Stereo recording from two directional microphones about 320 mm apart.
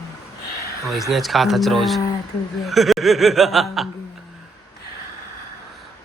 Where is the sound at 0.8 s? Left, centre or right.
Centre.